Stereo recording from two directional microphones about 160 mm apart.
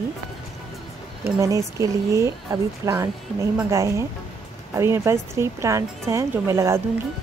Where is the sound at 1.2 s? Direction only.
20° right (ahead or behind).